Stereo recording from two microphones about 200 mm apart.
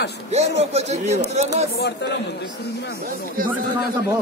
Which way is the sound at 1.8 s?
55° left (ahead or behind).